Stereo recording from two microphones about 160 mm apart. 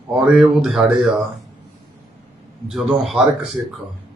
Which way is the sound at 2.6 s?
Centre (ahead or behind).